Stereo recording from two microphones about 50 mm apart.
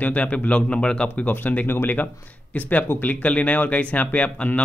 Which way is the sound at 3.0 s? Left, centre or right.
Left.